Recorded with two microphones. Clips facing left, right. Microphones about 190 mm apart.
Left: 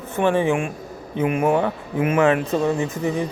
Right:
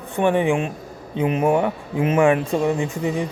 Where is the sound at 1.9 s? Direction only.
30° right (ahead or behind).